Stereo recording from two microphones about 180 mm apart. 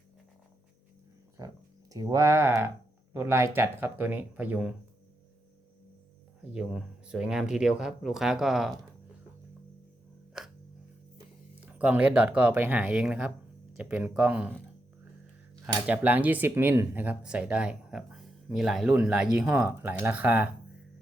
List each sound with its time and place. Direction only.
1.4 s speech: 20° right (ahead or behind)
6.5 s speech: 5° right (ahead or behind)
10.4 s a sound: 5° right (ahead or behind)
11.6 s speech: 10° right (ahead or behind)
15.6 s speech: 10° right (ahead or behind)